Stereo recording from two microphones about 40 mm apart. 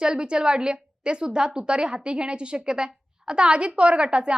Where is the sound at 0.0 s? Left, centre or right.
Right.